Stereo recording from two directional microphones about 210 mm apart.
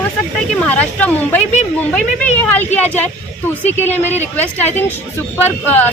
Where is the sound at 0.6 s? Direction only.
5° left (ahead or behind).